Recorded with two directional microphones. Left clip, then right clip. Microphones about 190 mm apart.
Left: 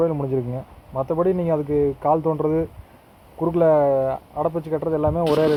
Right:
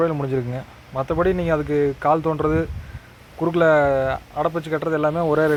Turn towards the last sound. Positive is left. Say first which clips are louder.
# even
turn(degrees=-15)  # may be behind; listen again after turning